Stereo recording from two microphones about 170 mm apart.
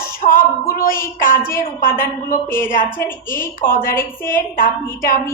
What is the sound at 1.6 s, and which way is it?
A woman's voice, 55° left (ahead or behind).